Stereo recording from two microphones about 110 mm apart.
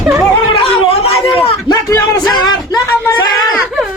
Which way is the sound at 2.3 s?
40° left (ahead or behind).